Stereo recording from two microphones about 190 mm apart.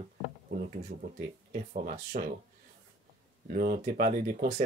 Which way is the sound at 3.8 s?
45° right (ahead or behind).